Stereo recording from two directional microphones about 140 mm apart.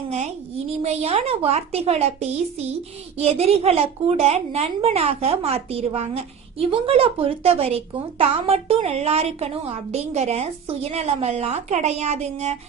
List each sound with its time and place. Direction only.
0.1 s a woman's voice: 50° right (ahead or behind)